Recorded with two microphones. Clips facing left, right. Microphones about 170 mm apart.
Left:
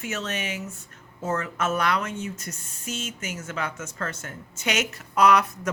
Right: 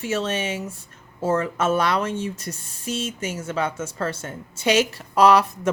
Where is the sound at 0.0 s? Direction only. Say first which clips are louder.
Right 6 dB; 30° right (ahead or behind).